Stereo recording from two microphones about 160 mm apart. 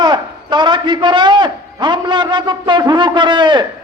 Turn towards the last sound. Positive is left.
turn(degrees=-30)  # may be behind; listen again after turning